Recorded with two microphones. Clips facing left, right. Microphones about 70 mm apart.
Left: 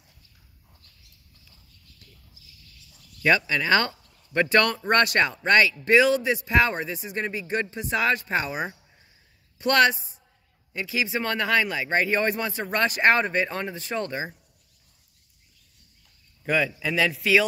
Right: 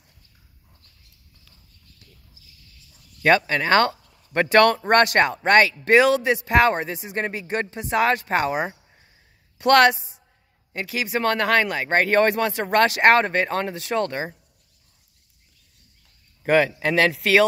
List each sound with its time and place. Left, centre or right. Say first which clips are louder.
3.2 s speech: right 4 dB; right
16.4 s speech: right 6 dB; right